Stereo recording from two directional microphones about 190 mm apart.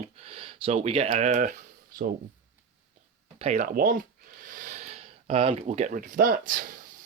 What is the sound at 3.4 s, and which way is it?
Speech, 35° right (ahead or behind).